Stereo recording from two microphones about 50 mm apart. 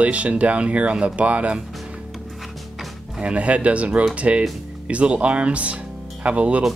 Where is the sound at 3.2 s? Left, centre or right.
Right.